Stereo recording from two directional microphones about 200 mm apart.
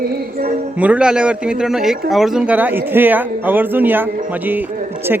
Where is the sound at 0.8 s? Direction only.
5° right (ahead or behind).